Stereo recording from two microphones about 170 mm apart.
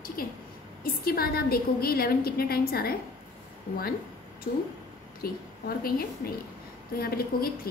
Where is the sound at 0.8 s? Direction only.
60° left (ahead or behind).